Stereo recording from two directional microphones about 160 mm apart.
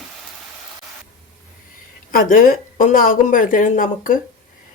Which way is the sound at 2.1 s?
60° left (ahead or behind).